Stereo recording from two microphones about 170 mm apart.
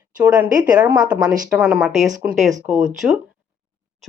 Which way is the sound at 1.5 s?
5° right (ahead or behind).